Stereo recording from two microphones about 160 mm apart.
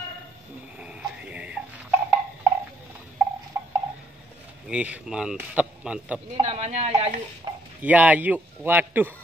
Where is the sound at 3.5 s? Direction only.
15° right (ahead or behind).